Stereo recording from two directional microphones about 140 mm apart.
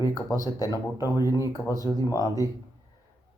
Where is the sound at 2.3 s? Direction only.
25° right (ahead or behind).